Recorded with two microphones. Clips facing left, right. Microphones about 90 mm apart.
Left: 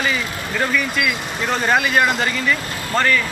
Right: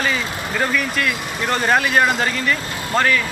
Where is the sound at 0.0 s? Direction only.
Centre (ahead or behind).